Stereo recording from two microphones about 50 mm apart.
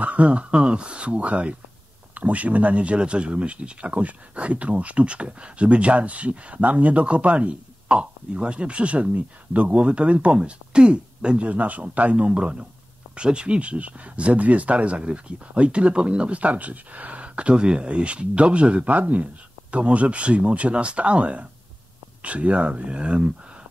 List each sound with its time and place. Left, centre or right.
0.0 s speech: right